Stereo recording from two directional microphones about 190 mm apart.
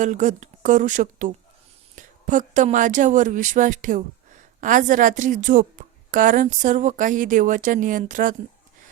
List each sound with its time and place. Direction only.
0.0 s a woman's voice: 40° right (ahead or behind)